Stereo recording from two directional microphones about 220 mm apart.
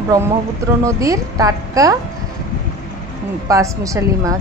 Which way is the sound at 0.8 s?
15° right (ahead or behind).